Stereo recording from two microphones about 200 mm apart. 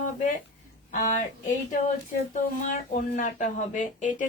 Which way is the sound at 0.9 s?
40° left (ahead or behind).